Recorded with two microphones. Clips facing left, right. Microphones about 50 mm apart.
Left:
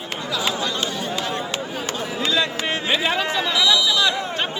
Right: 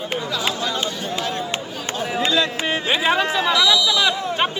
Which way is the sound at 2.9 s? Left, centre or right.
Centre.